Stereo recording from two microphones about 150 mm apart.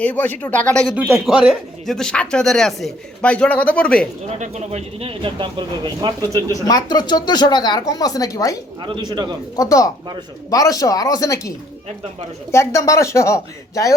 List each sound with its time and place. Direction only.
0.0 s speech: 10° left (ahead or behind)
4.4 s speech: 45° right (ahead or behind); by 6.4 s 30° right (ahead or behind)
6.5 s speech: 25° left (ahead or behind)
8.8 s speech: 30° right (ahead or behind)
9.6 s speech: 25° left (ahead or behind)